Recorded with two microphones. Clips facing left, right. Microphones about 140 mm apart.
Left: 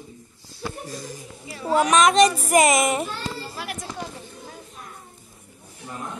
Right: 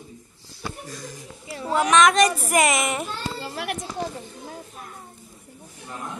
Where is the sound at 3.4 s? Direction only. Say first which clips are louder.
Right 4 dB; 65° right (ahead or behind).